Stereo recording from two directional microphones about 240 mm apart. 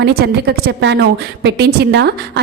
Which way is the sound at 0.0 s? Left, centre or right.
Right.